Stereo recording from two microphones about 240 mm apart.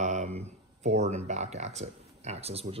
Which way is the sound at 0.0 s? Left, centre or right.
Right.